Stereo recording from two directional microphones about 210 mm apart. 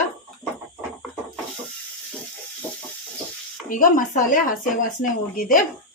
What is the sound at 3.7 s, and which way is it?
Speech, 40° left (ahead or behind).